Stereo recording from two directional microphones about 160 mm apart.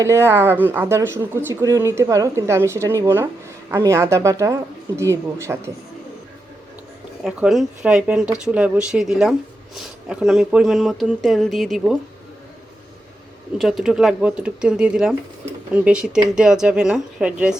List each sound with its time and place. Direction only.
0.0 s speech: 15° right (ahead or behind)
7.3 s speech: 5° right (ahead or behind)
13.6 s speech: centre (ahead or behind)